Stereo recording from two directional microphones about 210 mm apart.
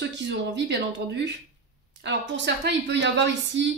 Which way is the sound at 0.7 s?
55° right (ahead or behind).